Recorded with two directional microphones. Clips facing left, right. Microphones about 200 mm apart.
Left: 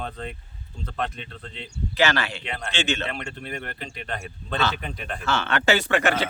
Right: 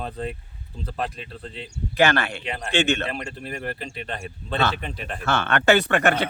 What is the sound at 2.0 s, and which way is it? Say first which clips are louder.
Speech: right 3 dB; 55° right (ahead or behind).